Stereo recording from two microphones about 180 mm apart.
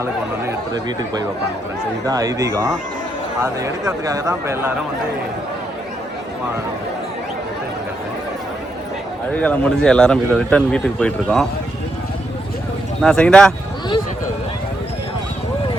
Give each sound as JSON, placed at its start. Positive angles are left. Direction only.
{"t": 0.0, "sound": "speech", "side_deg": -20}
{"t": 9.3, "sound": "speech", "side_deg": 10}
{"t": 13.0, "sound": "speech", "side_deg": 5}